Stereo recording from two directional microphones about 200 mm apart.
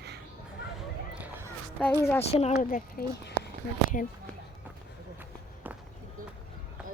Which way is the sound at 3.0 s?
50° left (ahead or behind).